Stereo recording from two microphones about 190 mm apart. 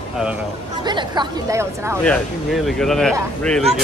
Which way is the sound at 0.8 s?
25° right (ahead or behind).